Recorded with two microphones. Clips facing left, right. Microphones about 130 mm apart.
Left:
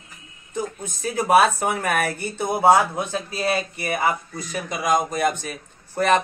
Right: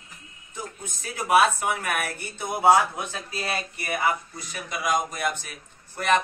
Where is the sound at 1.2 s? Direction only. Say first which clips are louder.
Left 3 dB; 40° left (ahead or behind).